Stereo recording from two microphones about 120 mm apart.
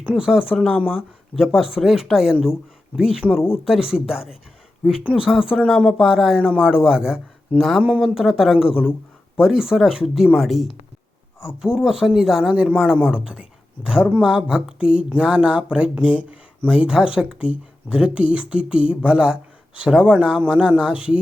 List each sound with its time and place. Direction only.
0.0 s speech: 5° right (ahead or behind)
3.3 s speech: 20° left (ahead or behind)
3.6 s speech: 5° right (ahead or behind)